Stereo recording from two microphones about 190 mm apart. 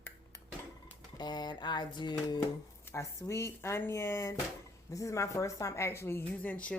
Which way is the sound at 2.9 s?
15° left (ahead or behind).